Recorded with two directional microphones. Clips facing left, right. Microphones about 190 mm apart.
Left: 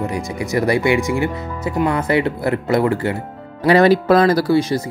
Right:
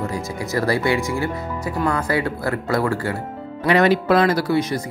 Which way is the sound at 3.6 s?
35° left (ahead or behind).